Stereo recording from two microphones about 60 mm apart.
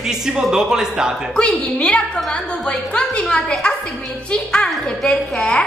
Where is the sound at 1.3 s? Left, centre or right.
Centre.